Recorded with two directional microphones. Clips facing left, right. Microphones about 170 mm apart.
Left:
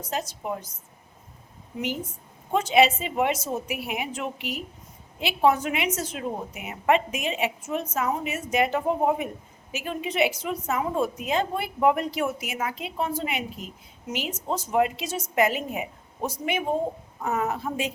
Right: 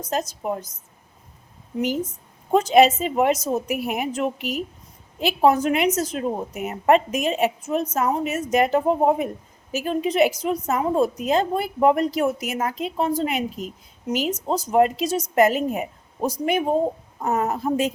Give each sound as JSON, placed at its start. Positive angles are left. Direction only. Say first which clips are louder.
{"t": 0.0, "sound": "a woman's voice", "louder": "right 5 dB", "side_deg": -40}
{"t": 1.8, "sound": "a woman's voice", "louder": "right 6 dB", "side_deg": -40}